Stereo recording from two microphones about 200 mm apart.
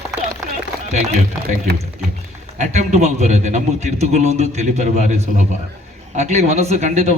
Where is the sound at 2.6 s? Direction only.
35° right (ahead or behind).